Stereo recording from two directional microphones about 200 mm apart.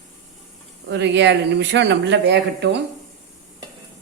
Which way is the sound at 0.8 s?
60° right (ahead or behind).